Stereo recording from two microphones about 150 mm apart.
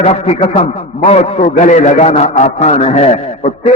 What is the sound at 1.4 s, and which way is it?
A man's voice, 55° left (ahead or behind).